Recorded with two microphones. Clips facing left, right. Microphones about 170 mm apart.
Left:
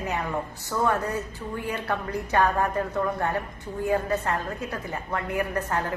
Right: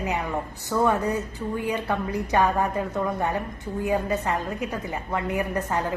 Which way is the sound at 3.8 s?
15° right (ahead or behind).